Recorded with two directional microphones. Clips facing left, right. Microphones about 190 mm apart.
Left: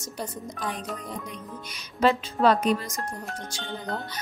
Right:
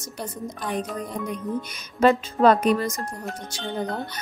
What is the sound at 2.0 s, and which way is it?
Speech, 50° right (ahead or behind).